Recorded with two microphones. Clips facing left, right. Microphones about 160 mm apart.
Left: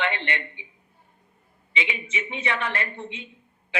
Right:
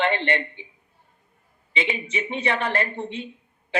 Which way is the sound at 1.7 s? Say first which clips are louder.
Right 4 dB; 35° right (ahead or behind).